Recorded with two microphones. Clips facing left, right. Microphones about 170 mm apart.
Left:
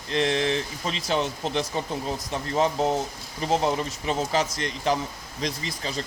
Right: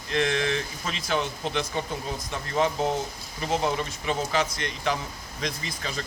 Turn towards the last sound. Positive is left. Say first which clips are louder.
# left 2 dB
turn(degrees=30)  # may be behind; listen again after turning